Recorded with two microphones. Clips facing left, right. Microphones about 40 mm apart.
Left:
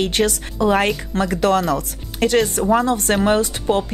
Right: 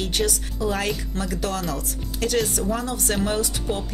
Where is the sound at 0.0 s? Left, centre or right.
Left.